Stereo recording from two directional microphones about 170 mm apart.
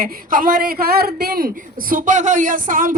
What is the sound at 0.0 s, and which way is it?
Speech, 55° right (ahead or behind).